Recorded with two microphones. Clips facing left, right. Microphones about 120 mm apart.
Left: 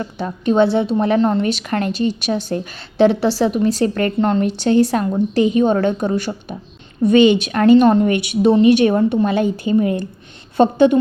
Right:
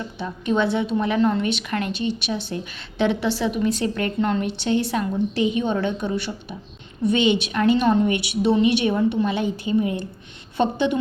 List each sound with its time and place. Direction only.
0.4 s a woman's voice: 30° left (ahead or behind)